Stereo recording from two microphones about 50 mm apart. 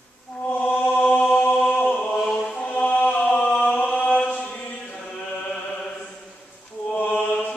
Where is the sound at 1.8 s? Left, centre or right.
Left.